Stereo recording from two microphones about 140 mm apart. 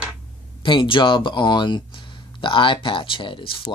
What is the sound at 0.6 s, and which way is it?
Speech, 35° left (ahead or behind).